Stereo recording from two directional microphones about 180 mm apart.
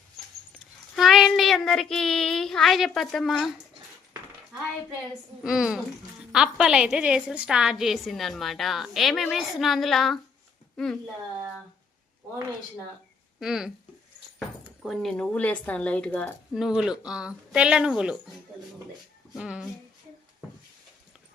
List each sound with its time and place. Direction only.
0.9 s child singing: centre (ahead or behind)
5.4 s a woman's voice: 5° right (ahead or behind)
13.4 s a woman's voice: centre (ahead or behind)
16.6 s a woman's voice: 5° right (ahead or behind)
19.4 s a woman's voice: 5° right (ahead or behind)